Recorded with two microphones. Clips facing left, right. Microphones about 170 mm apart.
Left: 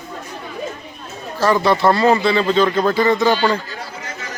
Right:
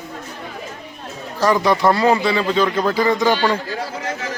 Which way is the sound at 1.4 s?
15° right (ahead or behind).